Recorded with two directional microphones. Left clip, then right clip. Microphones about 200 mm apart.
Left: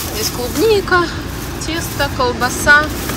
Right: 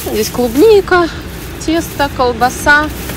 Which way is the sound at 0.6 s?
5° left (ahead or behind).